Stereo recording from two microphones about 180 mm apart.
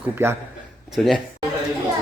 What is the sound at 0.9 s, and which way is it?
Speech, centre (ahead or behind).